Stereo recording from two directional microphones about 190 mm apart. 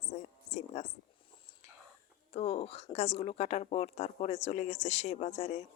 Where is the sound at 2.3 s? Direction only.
30° left (ahead or behind).